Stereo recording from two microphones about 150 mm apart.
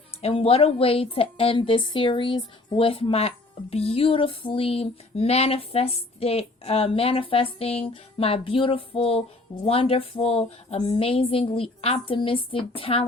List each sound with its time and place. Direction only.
0.2 s a woman's voice: 40° left (ahead or behind)